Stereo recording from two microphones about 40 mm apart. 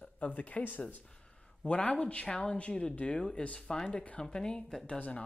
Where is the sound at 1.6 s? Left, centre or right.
Left.